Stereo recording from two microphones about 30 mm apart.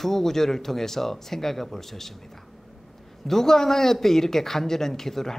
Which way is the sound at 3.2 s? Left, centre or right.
Centre.